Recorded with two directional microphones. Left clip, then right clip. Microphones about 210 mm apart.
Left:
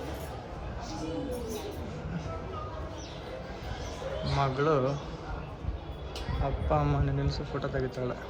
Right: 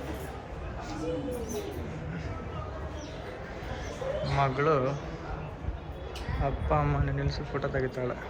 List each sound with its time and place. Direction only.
4.4 s a man's voice: 15° left (ahead or behind)
6.4 s a man's voice: 15° left (ahead or behind)